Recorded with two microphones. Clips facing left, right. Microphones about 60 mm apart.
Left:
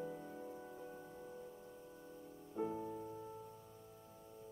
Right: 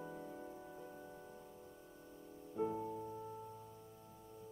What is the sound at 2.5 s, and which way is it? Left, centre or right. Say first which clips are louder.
Music: right 2 dB; centre.